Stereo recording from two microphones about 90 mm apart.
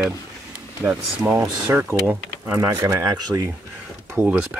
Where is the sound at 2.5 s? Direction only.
40° right (ahead or behind).